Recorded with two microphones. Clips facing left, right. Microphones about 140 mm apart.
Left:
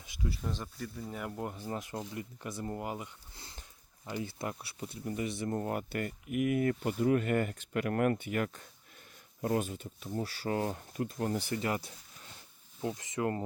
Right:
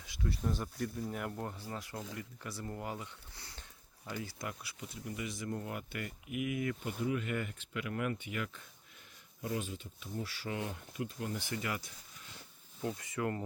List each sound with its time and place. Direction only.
0.4 s speech: centre (ahead or behind)
1.4 s speech: 15° left (ahead or behind); by 11.9 s 35° left (ahead or behind)
12.8 s speech: 20° left (ahead or behind)